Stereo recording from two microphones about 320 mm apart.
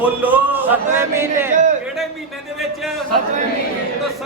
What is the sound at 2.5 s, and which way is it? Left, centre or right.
Speech, centre.